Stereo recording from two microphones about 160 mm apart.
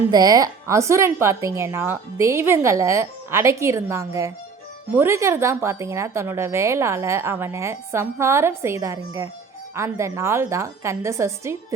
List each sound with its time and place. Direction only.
0.0 s a woman's voice: 20° right (ahead or behind)